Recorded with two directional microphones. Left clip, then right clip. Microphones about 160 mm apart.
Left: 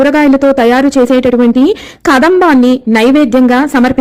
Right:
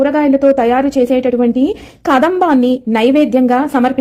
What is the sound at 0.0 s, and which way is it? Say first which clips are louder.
A woman's voice: left 3 dB; 20° left (ahead or behind).